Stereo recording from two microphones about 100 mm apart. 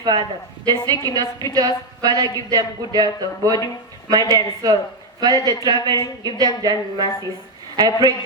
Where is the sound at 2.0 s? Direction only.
40° right (ahead or behind).